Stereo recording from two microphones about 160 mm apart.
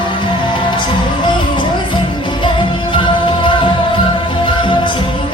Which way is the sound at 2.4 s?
30° left (ahead or behind).